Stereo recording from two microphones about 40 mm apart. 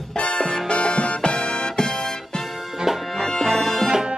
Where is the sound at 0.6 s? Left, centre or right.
Left.